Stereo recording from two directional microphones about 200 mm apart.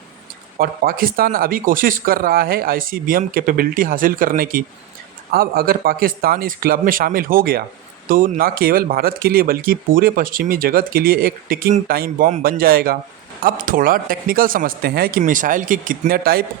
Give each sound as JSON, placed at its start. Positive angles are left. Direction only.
{"t": 0.6, "sound": "speech", "side_deg": -45}